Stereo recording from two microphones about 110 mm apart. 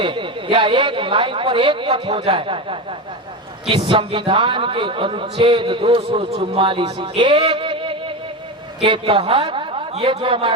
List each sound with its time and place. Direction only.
0.0 s a man's voice: 50° right (ahead or behind)
6.6 s a man's voice: 50° right (ahead or behind)